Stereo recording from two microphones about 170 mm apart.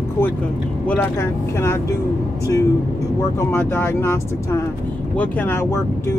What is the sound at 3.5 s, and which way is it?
Speech, 10° left (ahead or behind).